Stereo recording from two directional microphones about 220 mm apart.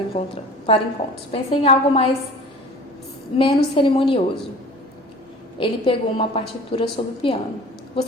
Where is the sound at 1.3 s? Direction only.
25° left (ahead or behind).